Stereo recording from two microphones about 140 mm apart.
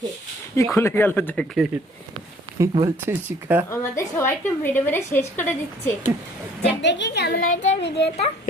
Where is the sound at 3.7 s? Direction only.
20° left (ahead or behind).